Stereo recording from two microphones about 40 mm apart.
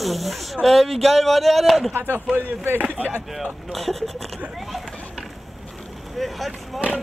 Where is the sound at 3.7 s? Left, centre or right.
Centre.